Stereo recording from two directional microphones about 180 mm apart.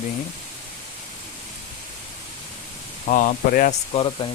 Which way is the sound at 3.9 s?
30° left (ahead or behind).